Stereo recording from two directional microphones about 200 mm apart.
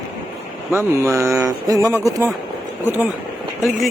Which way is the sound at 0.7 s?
15° right (ahead or behind).